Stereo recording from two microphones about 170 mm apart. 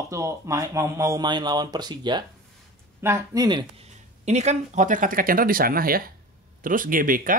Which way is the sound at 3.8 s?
40° right (ahead or behind).